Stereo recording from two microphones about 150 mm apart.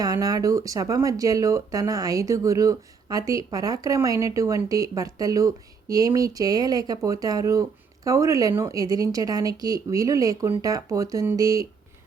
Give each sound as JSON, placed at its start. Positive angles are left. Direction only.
{"t": 0.0, "sound": "speech", "side_deg": -25}